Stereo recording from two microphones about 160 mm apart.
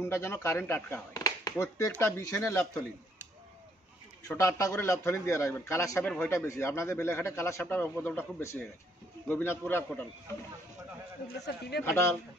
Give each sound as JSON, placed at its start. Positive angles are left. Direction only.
{"t": 0.0, "sound": "a man's voice", "side_deg": 15}
{"t": 4.3, "sound": "a man's voice", "side_deg": 20}
{"t": 11.3, "sound": "a man's voice", "side_deg": 90}
{"t": 11.8, "sound": "a man's voice", "side_deg": 15}